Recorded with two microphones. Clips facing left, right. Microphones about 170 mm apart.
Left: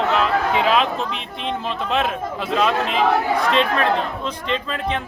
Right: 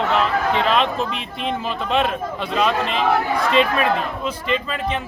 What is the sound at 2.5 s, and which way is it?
A man's voice, centre (ahead or behind).